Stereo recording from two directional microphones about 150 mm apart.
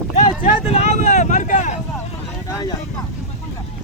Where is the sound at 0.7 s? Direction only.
45° left (ahead or behind).